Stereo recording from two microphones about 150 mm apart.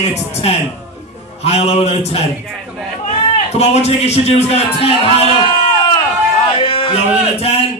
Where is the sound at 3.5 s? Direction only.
45° left (ahead or behind).